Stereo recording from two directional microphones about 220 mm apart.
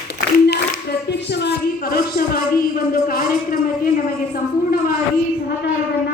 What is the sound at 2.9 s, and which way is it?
Speech, 40° left (ahead or behind).